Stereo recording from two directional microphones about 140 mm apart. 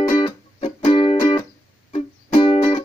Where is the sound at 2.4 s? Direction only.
40° left (ahead or behind).